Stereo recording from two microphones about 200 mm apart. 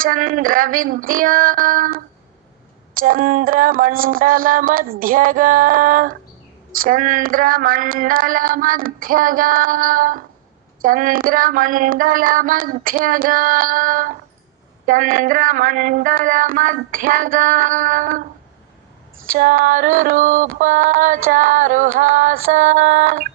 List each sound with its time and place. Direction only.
0.0 s speech: 45° right (ahead or behind)
19.3 s a sound: 45° right (ahead or behind)
22.4 s speech: 40° right (ahead or behind)